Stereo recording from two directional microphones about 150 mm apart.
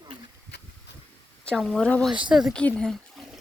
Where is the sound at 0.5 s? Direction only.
90° left.